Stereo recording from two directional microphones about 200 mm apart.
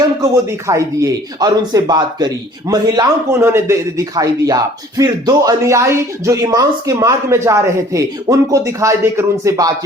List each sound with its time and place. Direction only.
0.7 s speech: 15° right (ahead or behind)